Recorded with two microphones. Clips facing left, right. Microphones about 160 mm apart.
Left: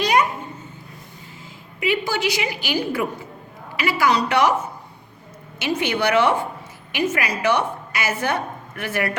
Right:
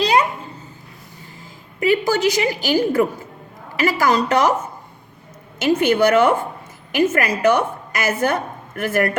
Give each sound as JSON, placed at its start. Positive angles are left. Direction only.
{"t": 0.0, "sound": "babbling", "side_deg": -30}
{"t": 1.8, "sound": "a woman's voice", "side_deg": -40}
{"t": 5.5, "sound": "a woman's voice", "side_deg": -45}